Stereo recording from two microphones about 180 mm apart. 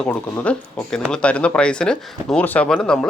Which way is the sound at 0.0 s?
10° left (ahead or behind).